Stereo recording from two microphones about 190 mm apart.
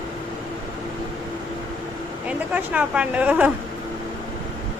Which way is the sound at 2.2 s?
10° right (ahead or behind).